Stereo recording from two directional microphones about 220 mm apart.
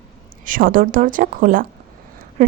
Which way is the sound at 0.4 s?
40° right (ahead or behind).